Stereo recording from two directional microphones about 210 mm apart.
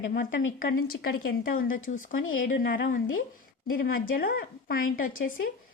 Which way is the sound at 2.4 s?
40° left (ahead or behind).